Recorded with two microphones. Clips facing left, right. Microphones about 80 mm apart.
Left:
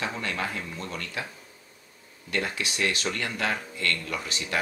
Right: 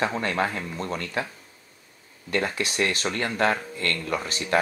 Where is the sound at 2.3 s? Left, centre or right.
Right.